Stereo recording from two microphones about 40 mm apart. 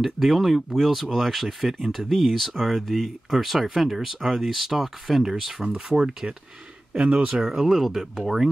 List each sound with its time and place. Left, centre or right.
0.0 s speech: centre
7.1 s speech: right
7.4 s speech: centre